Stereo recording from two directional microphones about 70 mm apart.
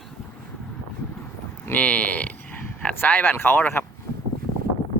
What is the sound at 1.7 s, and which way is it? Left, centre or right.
Speech, left.